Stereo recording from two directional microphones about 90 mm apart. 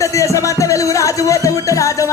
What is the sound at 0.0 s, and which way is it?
Music, 35° left (ahead or behind).